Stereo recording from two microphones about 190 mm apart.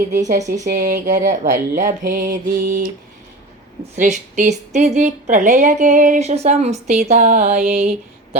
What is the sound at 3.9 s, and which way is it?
Speech, 40° right (ahead or behind).